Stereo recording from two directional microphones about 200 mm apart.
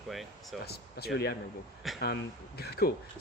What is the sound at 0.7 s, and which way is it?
Speech, 50° left (ahead or behind).